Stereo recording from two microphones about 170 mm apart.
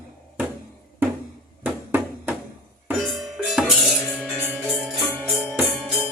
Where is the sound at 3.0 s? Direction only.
Centre (ahead or behind).